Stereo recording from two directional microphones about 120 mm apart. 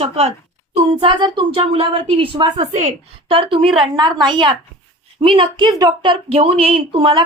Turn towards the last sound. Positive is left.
turn(degrees=-45)  # may be behind; listen again after turning